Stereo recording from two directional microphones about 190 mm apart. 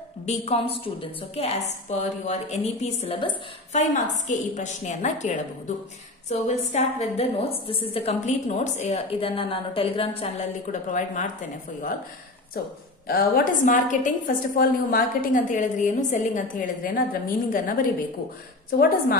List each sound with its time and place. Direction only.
0.3 s a woman's voice: 30° left (ahead or behind)
6.4 s a woman's voice: 35° left (ahead or behind)
13.0 s a woman's voice: 50° left (ahead or behind)